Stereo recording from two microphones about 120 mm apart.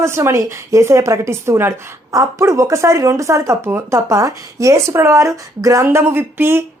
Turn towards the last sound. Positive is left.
turn(degrees=-20)  # may be behind; listen again after turning